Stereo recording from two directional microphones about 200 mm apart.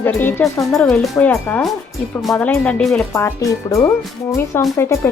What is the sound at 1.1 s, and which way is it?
Speech, 10° left (ahead or behind).